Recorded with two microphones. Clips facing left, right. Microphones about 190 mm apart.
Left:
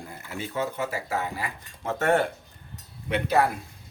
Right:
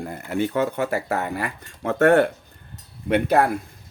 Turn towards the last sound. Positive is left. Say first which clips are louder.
# right 5 dB
turn(degrees=-55)  # may be behind; listen again after turning